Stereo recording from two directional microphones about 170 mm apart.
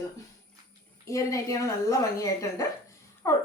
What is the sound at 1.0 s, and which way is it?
Speech, 20° left (ahead or behind).